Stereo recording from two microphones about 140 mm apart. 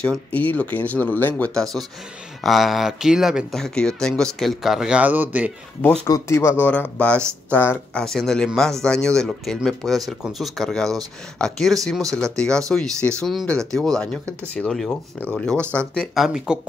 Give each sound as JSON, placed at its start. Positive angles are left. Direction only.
{"t": 0.0, "sound": "speech", "side_deg": 10}
{"t": 6.0, "sound": "speech", "side_deg": 20}
{"t": 8.0, "sound": "speech", "side_deg": 5}